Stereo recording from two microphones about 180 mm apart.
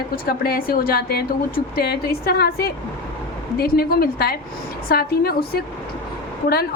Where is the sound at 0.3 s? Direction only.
55° left (ahead or behind).